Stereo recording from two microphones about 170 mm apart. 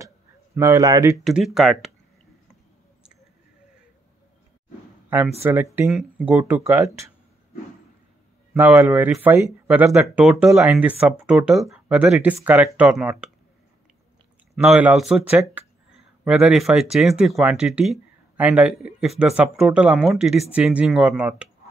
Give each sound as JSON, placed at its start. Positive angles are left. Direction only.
{"t": 0.6, "sound": "speech", "side_deg": -20}
{"t": 1.1, "sound": "speech", "side_deg": 0}
{"t": 5.4, "sound": "speech", "side_deg": -15}
{"t": 5.9, "sound": "speech", "side_deg": 0}
{"t": 8.5, "sound": "speech", "side_deg": -10}
{"t": 10.0, "sound": "speech", "side_deg": 0}
{"t": 14.5, "sound": "speech", "side_deg": -10}